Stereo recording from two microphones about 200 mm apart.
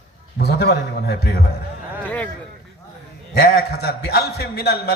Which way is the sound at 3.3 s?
50° left (ahead or behind).